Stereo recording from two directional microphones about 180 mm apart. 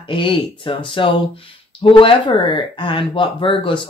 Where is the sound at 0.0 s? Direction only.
30° left (ahead or behind).